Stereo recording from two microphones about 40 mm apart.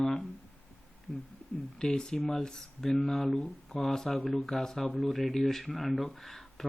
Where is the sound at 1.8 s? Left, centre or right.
Centre.